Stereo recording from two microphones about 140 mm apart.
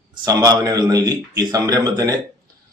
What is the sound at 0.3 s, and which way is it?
A man's voice, 30° right (ahead or behind).